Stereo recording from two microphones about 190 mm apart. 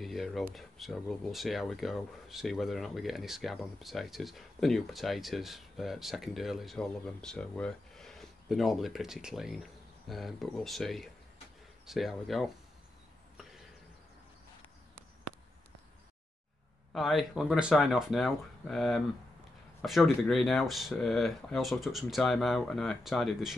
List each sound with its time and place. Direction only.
0.0 s speech: centre (ahead or behind)
16.9 s speech: centre (ahead or behind)